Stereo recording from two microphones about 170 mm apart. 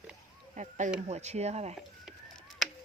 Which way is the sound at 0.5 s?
45° right (ahead or behind).